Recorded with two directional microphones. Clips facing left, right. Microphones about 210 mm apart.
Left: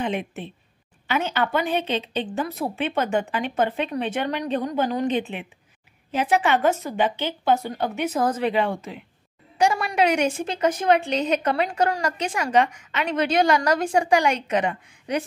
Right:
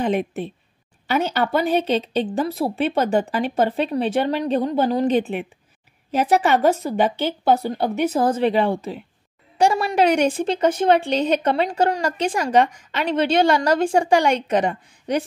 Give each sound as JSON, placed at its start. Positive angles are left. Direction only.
{"t": 0.0, "sound": "a woman's voice", "side_deg": -40}